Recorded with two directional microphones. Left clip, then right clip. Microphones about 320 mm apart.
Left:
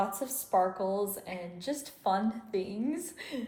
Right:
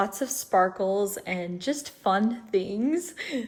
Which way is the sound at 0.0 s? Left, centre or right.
Right.